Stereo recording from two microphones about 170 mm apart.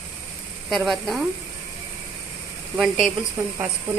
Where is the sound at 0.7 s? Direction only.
Centre (ahead or behind).